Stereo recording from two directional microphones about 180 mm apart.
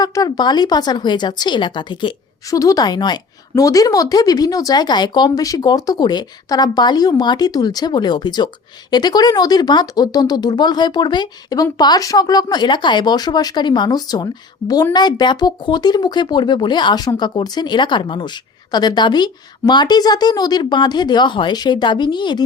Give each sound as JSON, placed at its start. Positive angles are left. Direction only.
{"t": 0.0, "sound": "speech", "side_deg": 20}